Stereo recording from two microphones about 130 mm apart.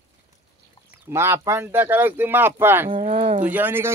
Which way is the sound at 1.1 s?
20° right (ahead or behind).